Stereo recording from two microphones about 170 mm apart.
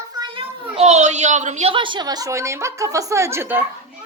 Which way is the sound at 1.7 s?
30° right (ahead or behind).